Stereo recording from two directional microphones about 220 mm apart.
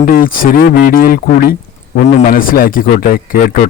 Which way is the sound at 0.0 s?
40° left (ahead or behind).